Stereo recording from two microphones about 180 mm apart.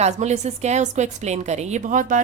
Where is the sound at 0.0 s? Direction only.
40° right (ahead or behind).